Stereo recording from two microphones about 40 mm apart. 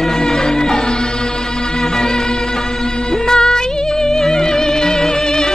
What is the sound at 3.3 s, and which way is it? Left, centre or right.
Music, centre.